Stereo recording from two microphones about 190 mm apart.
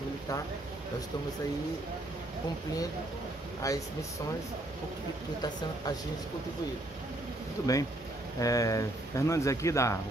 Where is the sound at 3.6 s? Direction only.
15° left (ahead or behind).